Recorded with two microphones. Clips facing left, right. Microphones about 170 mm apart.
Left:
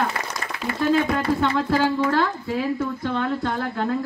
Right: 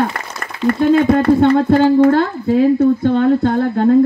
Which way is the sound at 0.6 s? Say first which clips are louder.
Right 9 dB; 50° right (ahead or behind).